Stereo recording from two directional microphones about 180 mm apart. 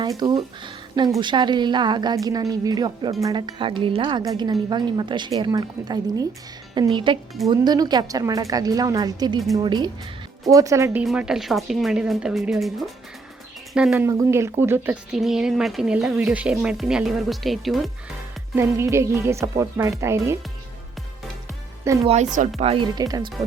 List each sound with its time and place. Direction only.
0.2 s a woman's voice: 25° right (ahead or behind)
11.0 s speech: 5° right (ahead or behind)
13.7 s speech: 5° right (ahead or behind)
14.1 s speech: 15° right (ahead or behind)
15.1 s speech: centre (ahead or behind)
18.5 s speech: 15° right (ahead or behind)
22.0 s a woman's voice: 40° right (ahead or behind)
22.6 s a woman's voice: 30° right (ahead or behind)